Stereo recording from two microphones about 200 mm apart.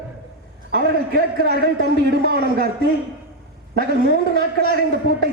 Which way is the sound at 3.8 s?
55° right (ahead or behind).